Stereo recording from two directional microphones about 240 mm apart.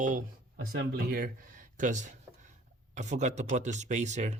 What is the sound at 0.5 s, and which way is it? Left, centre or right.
Speech, right.